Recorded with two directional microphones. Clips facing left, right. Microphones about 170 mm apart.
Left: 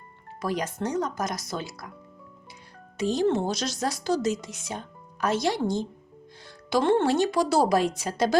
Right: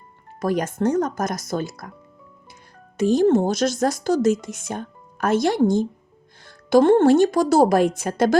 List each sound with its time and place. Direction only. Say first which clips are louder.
0.4 s a woman's voice: right 7 dB; 50° right (ahead or behind)
3.0 s a woman's voice: right 7 dB; 50° right (ahead or behind)